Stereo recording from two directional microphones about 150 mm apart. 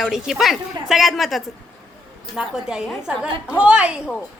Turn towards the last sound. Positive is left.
turn(degrees=-10)  # may be behind; listen again after turning